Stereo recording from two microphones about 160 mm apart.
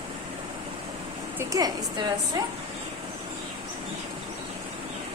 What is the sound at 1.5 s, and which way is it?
Speech, 25° right (ahead or behind).